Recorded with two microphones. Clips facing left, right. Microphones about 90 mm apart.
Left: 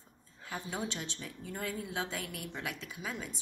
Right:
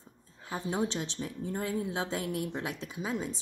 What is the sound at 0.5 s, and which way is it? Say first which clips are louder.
A woman's voice: right 6 dB; 25° right (ahead or behind).